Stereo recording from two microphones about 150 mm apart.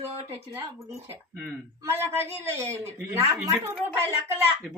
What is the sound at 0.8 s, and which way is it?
A man's voice, 20° right (ahead or behind).